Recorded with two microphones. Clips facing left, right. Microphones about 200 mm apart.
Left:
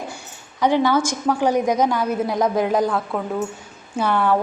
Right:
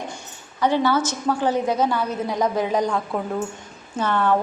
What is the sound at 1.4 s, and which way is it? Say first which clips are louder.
A woman's voice: left 3 dB; 15° left (ahead or behind).